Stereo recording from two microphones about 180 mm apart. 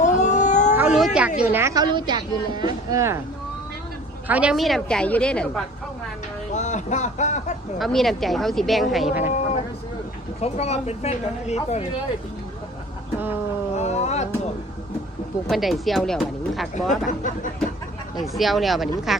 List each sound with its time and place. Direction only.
0.0 s a sound: 40° left (ahead or behind)
0.8 s cat: 5° right (ahead or behind)
1.4 s speech: 15° right (ahead or behind)
4.3 s speech: 5° right (ahead or behind)
6.5 s speech: 40° left (ahead or behind)
7.8 s speech: centre (ahead or behind)
9.2 s vehicle: 35° left (ahead or behind)
10.4 s speech: 35° left (ahead or behind)
13.7 s a sound: 40° left (ahead or behind)
15.4 s speech: centre (ahead or behind)
17.1 s speech: 45° left (ahead or behind)
18.2 s speech: centre (ahead or behind)